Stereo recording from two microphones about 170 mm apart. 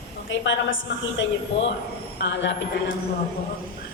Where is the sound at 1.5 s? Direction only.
35° left (ahead or behind).